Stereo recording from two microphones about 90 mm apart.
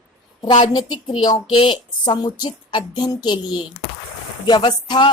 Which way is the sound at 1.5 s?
70° left (ahead or behind).